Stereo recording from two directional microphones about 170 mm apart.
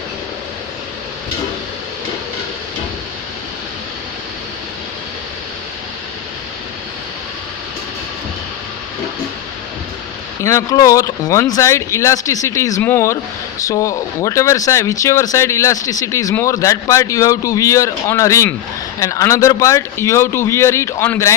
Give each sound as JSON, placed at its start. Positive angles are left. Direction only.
{"t": 10.4, "sound": "speech", "side_deg": 20}